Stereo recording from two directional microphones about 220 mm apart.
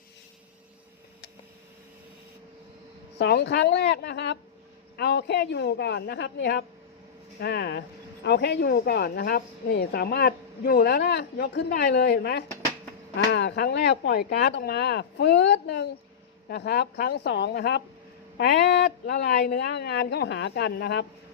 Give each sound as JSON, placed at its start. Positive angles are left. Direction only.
{"t": 3.2, "sound": "a woman's voice", "side_deg": 50}